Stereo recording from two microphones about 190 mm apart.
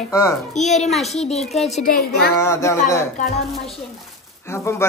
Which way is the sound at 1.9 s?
55° left (ahead or behind).